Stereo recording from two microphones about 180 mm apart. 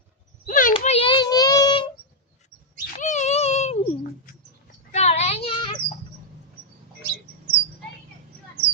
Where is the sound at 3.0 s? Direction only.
40° left (ahead or behind).